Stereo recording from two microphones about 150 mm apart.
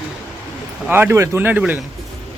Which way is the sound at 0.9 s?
15° right (ahead or behind).